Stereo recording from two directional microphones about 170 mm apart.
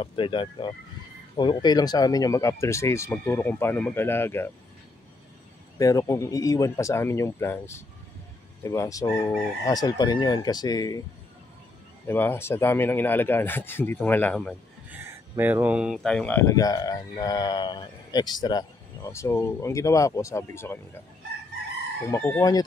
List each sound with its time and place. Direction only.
0.0 s speech: 30° left (ahead or behind); by 4.5 s 15° left (ahead or behind)
5.8 s speech: 20° left (ahead or behind)
12.1 s speech: 10° left (ahead or behind)
14.9 s speech: 15° right (ahead or behind); by 20.8 s 15° left (ahead or behind)
22.0 s speech: 20° left (ahead or behind)